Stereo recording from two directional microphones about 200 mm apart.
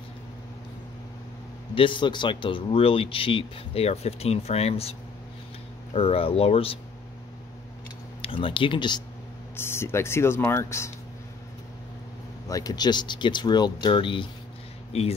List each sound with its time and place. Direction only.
1.8 s speech: 25° left (ahead or behind)
5.9 s speech: 30° left (ahead or behind)
8.2 s speech: 25° left (ahead or behind)
9.6 s speech: 10° left (ahead or behind)
12.4 s speech: 20° left (ahead or behind)